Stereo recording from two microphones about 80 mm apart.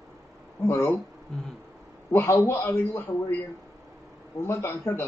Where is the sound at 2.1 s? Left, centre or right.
Left.